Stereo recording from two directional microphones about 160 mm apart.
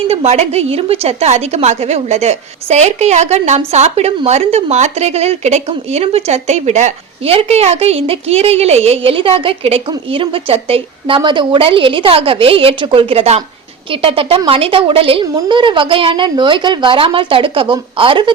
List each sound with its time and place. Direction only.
0.1 s a woman's voice: 40° right (ahead or behind)